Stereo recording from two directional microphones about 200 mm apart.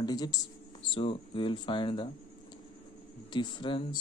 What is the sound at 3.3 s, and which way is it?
Speech, 20° left (ahead or behind).